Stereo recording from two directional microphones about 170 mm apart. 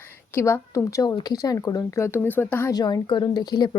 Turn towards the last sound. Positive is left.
turn(degrees=25)  # may be behind; listen again after turning